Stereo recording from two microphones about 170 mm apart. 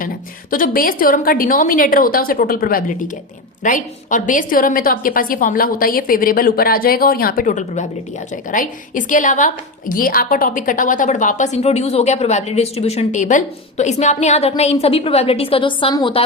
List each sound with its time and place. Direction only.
0.5 s a woman's voice: 55° left (ahead or behind); by 16.2 s 30° left (ahead or behind)